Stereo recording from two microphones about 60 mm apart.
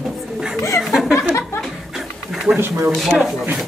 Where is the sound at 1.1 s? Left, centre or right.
Left.